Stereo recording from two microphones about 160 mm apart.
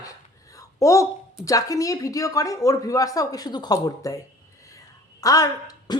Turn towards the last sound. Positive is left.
turn(degrees=25)  # may be behind; listen again after turning